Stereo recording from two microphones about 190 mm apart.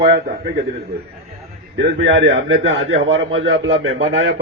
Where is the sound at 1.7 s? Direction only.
75° right (ahead or behind).